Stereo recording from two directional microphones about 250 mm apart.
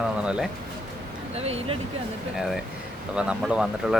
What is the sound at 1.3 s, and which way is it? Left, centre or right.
Speech, right.